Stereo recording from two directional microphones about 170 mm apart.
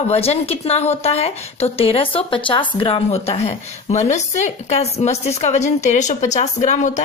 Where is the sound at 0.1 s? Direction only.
35° left (ahead or behind).